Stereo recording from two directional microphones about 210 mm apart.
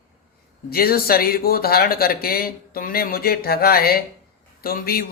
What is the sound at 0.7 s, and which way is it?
A man's voice, 45° left (ahead or behind).